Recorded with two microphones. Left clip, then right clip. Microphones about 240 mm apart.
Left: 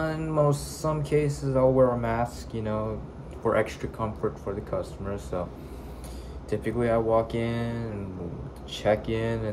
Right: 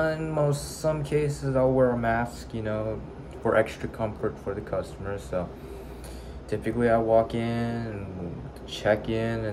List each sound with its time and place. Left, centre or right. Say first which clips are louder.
0.0 s speech: even; centre
6.5 s speech: right 2 dB; centre